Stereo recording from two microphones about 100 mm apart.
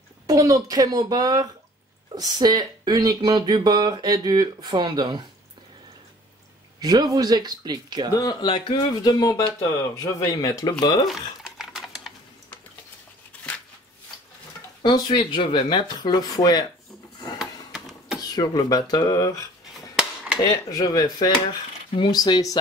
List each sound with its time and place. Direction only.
0.3 s speech: 35° right (ahead or behind)
6.8 s speech: 40° right (ahead or behind)
8.1 s speech: 40° left (ahead or behind); by 8.8 s 55° left (ahead or behind)
9.0 s speech: 40° left (ahead or behind)
11.1 s a sound: 5° right (ahead or behind)
14.8 s speech: 50° left (ahead or behind)
16.0 s speech: 40° left (ahead or behind)
17.4 s a sound: 5° right (ahead or behind)
18.2 s speech: 40° left (ahead or behind)
20.4 s speech: 35° left (ahead or behind)